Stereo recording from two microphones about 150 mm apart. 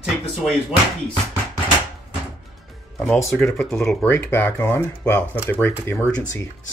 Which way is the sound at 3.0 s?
15° left (ahead or behind).